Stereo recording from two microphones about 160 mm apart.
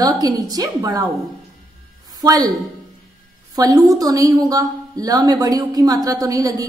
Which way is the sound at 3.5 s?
25° right (ahead or behind).